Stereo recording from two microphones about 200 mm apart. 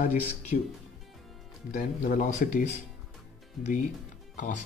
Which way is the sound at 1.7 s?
40° left (ahead or behind).